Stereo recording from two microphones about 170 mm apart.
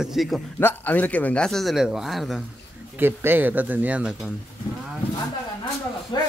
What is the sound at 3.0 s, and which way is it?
Speech, 10° right (ahead or behind).